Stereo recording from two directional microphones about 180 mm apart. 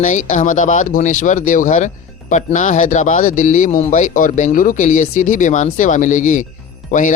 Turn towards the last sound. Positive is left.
turn(degrees=45)  # may be behind; listen again after turning